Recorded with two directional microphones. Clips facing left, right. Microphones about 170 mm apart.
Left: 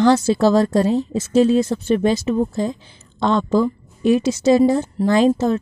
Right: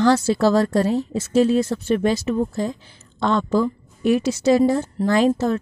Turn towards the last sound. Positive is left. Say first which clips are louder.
# left 2 dB
turn(degrees=20)  # may be behind; listen again after turning